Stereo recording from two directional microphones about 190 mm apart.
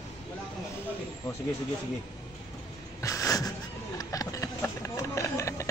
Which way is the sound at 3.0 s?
15° left (ahead or behind).